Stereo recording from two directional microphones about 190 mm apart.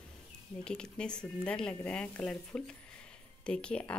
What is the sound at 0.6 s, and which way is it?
Speech, 5° left (ahead or behind).